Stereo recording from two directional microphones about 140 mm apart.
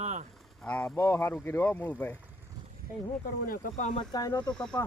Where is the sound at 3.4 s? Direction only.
90° left.